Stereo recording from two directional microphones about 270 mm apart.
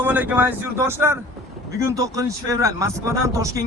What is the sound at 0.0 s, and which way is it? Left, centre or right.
A man's voice, centre.